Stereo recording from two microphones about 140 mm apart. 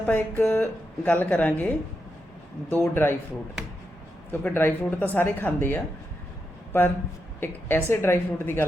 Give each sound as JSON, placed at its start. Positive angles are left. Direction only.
{"t": 0.0, "sound": "speech", "side_deg": 15}
{"t": 4.3, "sound": "speech", "side_deg": 15}
{"t": 7.3, "sound": "speech", "side_deg": 15}